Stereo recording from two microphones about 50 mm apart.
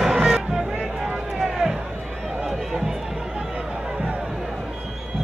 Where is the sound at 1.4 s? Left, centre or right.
Centre.